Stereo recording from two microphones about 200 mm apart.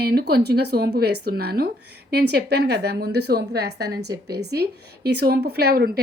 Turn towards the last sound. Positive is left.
turn(degrees=-50)  # may be behind; listen again after turning